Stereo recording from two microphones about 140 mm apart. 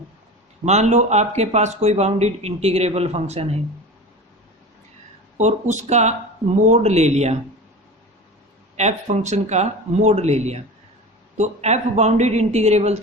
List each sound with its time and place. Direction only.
0.6 s speech: 55° right (ahead or behind)
5.4 s speech: 55° right (ahead or behind)
8.7 s speech: 55° right (ahead or behind)